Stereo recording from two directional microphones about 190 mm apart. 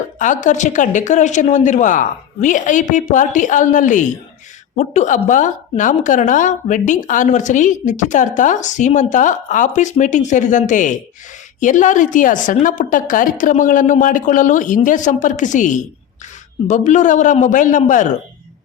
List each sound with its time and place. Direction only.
0.4 s a woman's voice: 40° left (ahead or behind)